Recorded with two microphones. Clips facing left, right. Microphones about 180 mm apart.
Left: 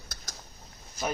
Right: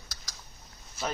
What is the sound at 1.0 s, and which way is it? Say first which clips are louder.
Speech: left 2 dB; 15° left (ahead or behind).